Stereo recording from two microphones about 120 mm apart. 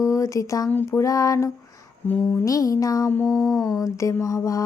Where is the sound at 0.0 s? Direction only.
25° left (ahead or behind).